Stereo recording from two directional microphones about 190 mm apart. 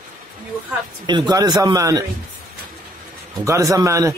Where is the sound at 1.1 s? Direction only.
20° right (ahead or behind).